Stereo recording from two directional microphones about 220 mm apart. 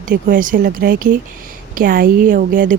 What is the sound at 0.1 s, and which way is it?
Speech, 35° right (ahead or behind).